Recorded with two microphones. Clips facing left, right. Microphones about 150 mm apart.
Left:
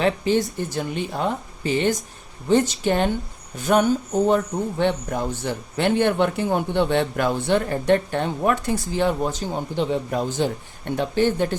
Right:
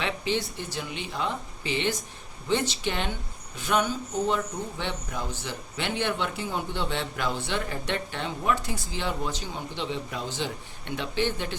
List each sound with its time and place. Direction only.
0.0 s a man's voice: 45° left (ahead or behind)